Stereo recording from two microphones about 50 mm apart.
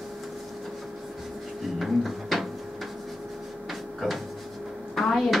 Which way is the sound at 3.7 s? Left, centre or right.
Centre.